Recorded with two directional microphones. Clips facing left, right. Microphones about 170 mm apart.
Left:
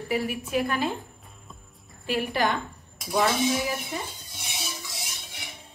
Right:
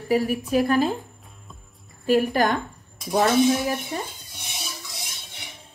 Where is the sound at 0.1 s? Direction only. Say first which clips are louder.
Right 6 dB; 40° right (ahead or behind).